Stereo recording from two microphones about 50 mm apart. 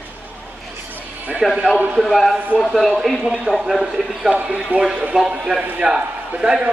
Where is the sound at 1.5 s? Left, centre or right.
Centre.